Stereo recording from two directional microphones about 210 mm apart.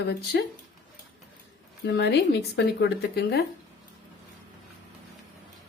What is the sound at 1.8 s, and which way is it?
Speech, 55° left (ahead or behind).